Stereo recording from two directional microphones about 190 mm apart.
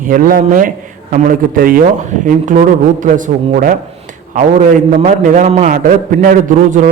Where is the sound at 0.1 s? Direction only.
50° right (ahead or behind).